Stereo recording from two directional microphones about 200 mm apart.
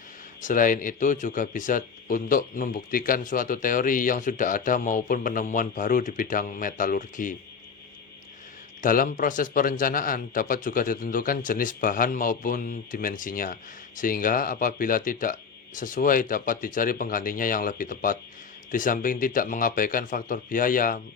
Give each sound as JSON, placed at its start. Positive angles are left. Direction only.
{"t": 0.4, "sound": "a man's voice", "side_deg": 40}
{"t": 8.8, "sound": "a man's voice", "side_deg": 45}